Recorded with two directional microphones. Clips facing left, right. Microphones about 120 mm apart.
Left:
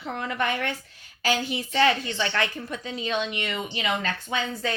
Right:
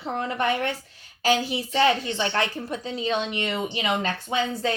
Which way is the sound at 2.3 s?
35° right (ahead or behind).